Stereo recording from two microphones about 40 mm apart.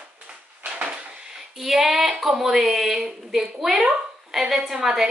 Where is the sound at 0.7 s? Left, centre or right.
Right.